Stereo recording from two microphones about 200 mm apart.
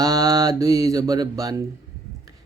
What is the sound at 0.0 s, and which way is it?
Music, 15° right (ahead or behind).